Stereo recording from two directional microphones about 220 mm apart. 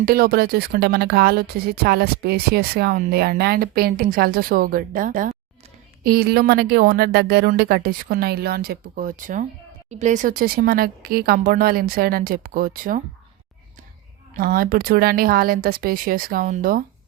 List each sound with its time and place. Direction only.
0.0 s speech: 45° right (ahead or behind)
14.3 s speech: 40° right (ahead or behind)